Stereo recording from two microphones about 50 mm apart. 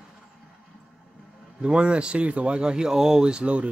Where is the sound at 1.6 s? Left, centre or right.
Centre.